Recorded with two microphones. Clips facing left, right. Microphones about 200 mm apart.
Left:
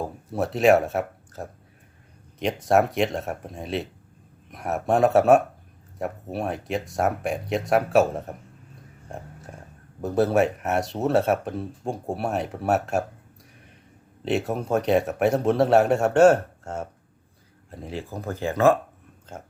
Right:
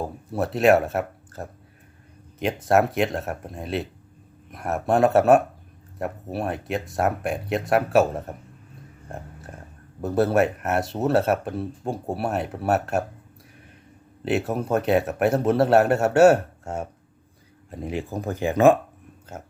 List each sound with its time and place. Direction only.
0.0 s speech: centre (ahead or behind)
9.0 s a sound: centre (ahead or behind)
10.0 s speech: centre (ahead or behind)
14.3 s speech: centre (ahead or behind)